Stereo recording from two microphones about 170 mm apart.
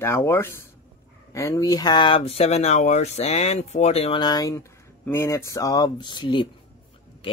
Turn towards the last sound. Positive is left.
turn(degrees=25)  # may be behind; listen again after turning